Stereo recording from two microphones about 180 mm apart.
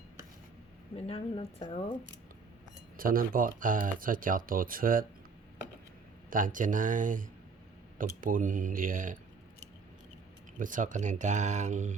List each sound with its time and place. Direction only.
1.0 s a woman's voice: 30° left (ahead or behind)
3.0 s speech: 50° right (ahead or behind)
6.3 s speech: 45° right (ahead or behind)
10.6 s speech: 45° right (ahead or behind)